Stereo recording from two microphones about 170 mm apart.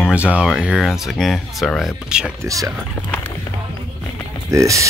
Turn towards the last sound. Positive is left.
turn(degrees=-20)  # may be behind; listen again after turning